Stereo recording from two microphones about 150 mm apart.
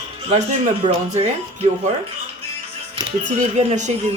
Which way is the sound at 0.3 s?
50° right (ahead or behind).